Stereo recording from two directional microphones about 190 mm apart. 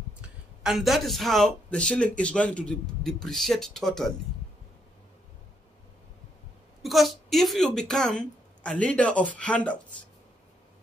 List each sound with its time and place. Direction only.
0.7 s speech: centre (ahead or behind)
6.8 s speech: centre (ahead or behind)